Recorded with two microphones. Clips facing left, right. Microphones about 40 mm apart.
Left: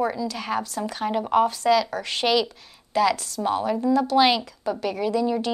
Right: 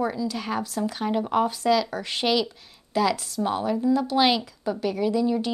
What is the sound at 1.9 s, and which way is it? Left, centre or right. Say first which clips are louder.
Speech: left 2 dB; centre.